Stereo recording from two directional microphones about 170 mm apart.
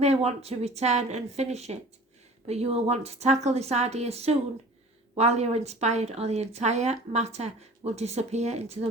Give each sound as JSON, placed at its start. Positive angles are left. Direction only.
{"t": 0.0, "sound": "a woman's voice", "side_deg": -40}